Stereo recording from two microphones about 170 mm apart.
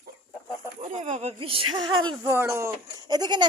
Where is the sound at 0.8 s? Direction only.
45° right (ahead or behind).